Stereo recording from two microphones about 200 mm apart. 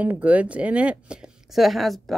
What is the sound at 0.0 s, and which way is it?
A woman's voice, 5° right (ahead or behind).